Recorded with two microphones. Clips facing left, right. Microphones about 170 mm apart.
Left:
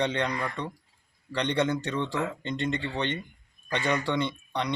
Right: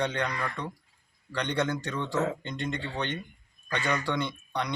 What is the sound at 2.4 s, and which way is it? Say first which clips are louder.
Mantra: left 4 dB; 5° right (ahead or behind).